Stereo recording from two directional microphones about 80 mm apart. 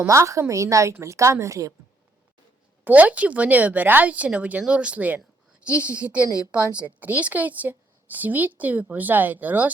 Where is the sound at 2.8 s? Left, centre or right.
Centre.